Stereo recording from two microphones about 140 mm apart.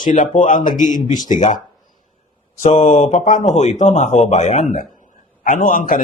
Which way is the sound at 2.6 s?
50° left (ahead or behind).